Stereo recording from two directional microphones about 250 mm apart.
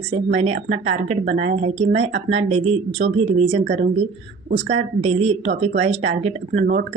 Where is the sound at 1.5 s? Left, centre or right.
Right.